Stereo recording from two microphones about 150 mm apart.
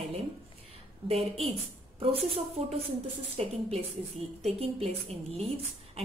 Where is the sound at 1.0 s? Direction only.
40° right (ahead or behind).